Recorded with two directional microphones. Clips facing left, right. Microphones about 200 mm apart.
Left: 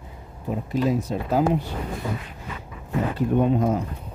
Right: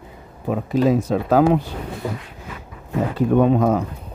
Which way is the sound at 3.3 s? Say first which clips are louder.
Right 5 dB; 90° right.